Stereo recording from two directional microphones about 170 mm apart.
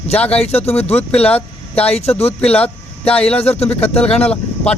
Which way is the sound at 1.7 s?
35° left (ahead or behind).